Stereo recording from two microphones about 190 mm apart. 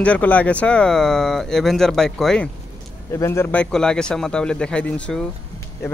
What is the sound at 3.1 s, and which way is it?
Speech, 15° left (ahead or behind).